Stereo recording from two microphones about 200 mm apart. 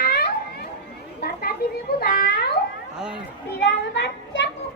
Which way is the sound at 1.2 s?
50° left (ahead or behind).